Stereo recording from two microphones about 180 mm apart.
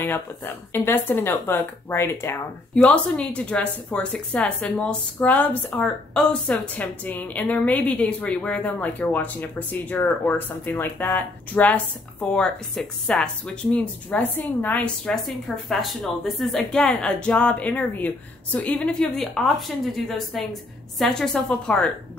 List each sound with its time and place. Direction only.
0.0 s a woman's voice: 10° left (ahead or behind)